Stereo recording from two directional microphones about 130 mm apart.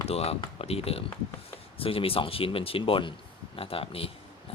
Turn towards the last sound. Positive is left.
turn(degrees=45)  # may be behind; listen again after turning